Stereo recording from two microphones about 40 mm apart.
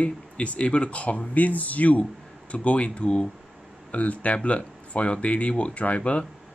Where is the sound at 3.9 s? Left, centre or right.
Left.